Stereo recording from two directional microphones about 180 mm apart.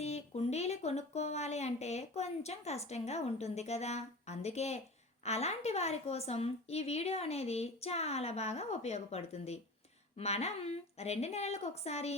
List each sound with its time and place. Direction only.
0.0 s a woman's voice: 35° left (ahead or behind)